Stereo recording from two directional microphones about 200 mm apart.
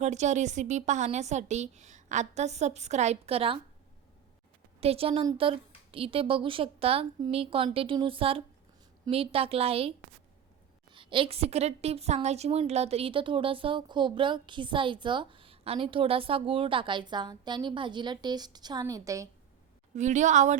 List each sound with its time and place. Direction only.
0.0 s a woman's voice: 35° right (ahead or behind)
4.8 s a woman's voice: 30° right (ahead or behind)
20.0 s a woman's voice: 35° right (ahead or behind)